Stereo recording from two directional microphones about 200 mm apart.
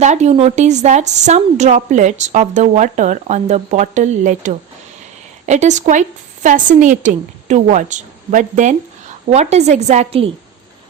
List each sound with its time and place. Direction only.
0.0 s a woman's voice: 35° right (ahead or behind)